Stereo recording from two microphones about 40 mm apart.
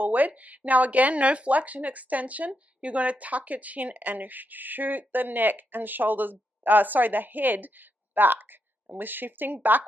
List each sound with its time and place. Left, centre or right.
0.0 s a woman's voice: right